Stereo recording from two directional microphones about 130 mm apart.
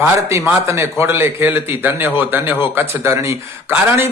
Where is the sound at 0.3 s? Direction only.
20° right (ahead or behind).